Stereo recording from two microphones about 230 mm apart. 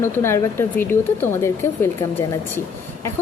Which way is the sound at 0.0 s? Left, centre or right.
Centre.